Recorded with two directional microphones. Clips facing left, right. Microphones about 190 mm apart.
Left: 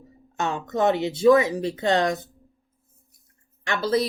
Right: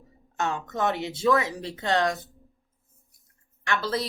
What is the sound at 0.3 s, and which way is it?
A woman's voice, 20° left (ahead or behind).